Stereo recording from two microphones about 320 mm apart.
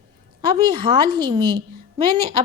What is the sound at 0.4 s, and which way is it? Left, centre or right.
A woman's voice, centre.